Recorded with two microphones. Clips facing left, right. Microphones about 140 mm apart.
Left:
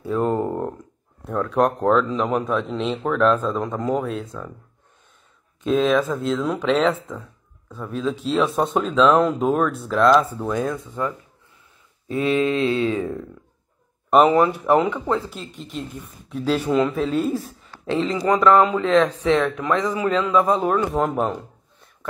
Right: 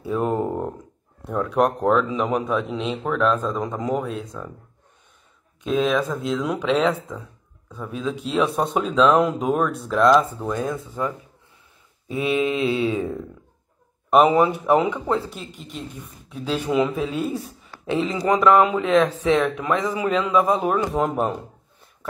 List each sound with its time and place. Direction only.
0.0 s a sound: 10° right (ahead or behind)
1.9 s a man's voice: centre (ahead or behind)
5.6 s a man's voice: 5° right (ahead or behind)
12.1 s a man's voice: 5° right (ahead or behind)
14.4 s a man's voice: centre (ahead or behind)
18.0 s speech: 20° right (ahead or behind)
20.9 s a man's voice: centre (ahead or behind)